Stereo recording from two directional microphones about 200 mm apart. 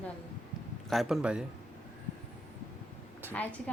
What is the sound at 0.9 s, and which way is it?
Speech, centre (ahead or behind).